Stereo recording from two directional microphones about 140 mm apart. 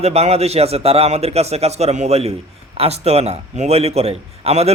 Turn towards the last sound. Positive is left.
turn(degrees=-50)  # may be behind; listen again after turning